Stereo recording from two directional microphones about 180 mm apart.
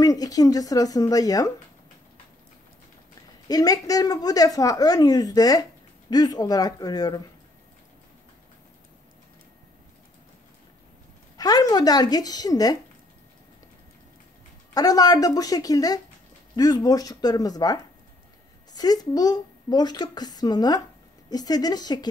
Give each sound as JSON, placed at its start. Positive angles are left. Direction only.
{"t": 0.0, "sound": "a woman's voice", "side_deg": 20}
{"t": 3.4, "sound": "a woman's voice", "side_deg": 20}
{"t": 11.3, "sound": "a woman's voice", "side_deg": 20}
{"t": 14.7, "sound": "a woman's voice", "side_deg": 20}